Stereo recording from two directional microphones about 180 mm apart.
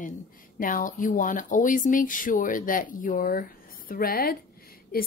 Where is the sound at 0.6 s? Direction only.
50° left (ahead or behind).